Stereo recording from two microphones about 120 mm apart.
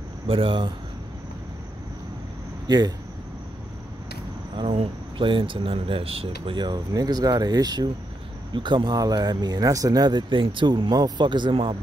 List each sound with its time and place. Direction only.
0.3 s speech: 45° right (ahead or behind)
2.6 s speech: 35° right (ahead or behind)
4.6 s speech: 50° right (ahead or behind)